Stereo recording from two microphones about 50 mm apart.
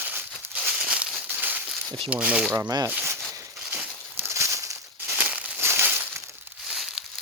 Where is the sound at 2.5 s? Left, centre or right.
Right.